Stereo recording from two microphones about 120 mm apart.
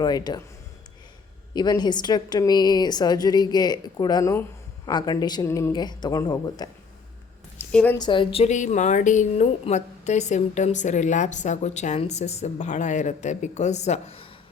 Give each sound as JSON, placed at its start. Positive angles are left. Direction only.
{"t": 0.0, "sound": "a woman's voice", "side_deg": 35}
{"t": 1.5, "sound": "a woman's voice", "side_deg": 35}
{"t": 4.9, "sound": "a woman's voice", "side_deg": 35}
{"t": 5.5, "sound": "speech", "side_deg": 20}
{"t": 5.7, "sound": "a woman's voice", "side_deg": 35}
{"t": 7.6, "sound": "a woman's voice", "side_deg": 10}
{"t": 7.9, "sound": "speech", "side_deg": 40}
{"t": 8.4, "sound": "a woman's voice", "side_deg": 85}